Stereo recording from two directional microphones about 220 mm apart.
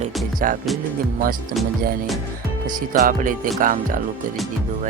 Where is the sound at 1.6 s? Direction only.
Centre (ahead or behind).